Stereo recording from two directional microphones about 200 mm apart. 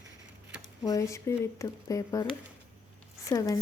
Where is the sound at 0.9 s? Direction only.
15° left (ahead or behind).